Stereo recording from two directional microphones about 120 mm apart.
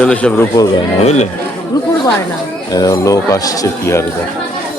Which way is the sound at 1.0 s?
75° left (ahead or behind).